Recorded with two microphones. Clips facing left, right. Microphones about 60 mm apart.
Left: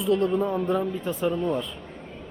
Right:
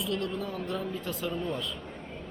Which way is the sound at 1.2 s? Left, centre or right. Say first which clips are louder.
Left 9 dB; left.